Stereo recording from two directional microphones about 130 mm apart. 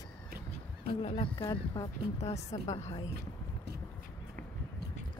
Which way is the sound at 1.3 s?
30° left (ahead or behind).